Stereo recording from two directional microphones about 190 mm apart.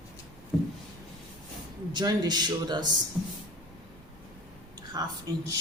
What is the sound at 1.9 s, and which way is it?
Speech, 20° right (ahead or behind).